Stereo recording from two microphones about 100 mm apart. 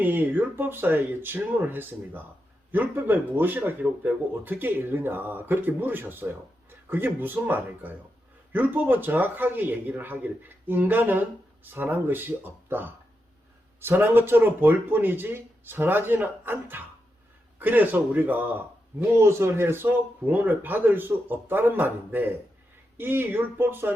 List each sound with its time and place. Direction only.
0.0 s a man's voice: 20° right (ahead or behind)